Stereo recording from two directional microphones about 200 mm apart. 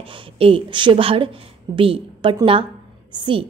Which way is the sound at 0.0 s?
25° right (ahead or behind).